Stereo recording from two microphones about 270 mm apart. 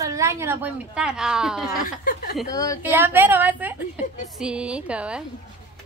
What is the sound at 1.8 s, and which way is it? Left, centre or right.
Speech, left.